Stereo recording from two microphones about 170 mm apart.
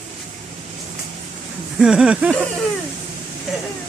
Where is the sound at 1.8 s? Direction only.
5° right (ahead or behind).